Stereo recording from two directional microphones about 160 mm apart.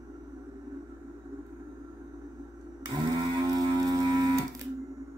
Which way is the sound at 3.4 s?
25° right (ahead or behind).